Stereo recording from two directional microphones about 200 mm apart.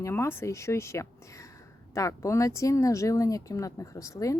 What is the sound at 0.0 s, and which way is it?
Speech, 10° left (ahead or behind).